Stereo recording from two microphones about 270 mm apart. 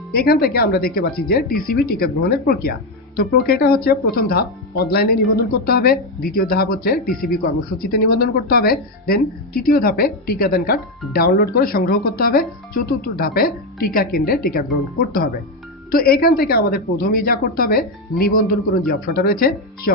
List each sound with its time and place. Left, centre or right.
0.1 s a woman's voice: left
15.9 s a woman's voice: left